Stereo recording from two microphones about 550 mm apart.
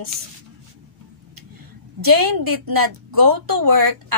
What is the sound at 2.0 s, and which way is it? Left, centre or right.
A woman's voice, right.